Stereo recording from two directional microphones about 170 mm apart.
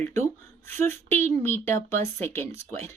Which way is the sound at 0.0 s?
15° left (ahead or behind).